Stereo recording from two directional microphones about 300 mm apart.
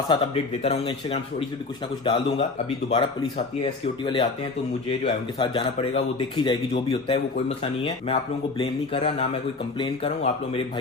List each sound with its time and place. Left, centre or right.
0.1 s speech: centre